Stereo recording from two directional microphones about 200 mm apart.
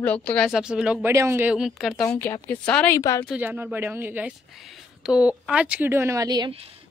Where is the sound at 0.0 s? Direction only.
5° left (ahead or behind).